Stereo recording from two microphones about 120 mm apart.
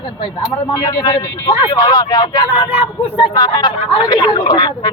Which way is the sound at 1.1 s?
35° left (ahead or behind).